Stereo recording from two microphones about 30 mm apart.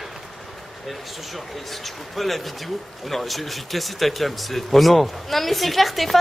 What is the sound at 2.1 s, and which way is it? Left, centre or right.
Speech, centre.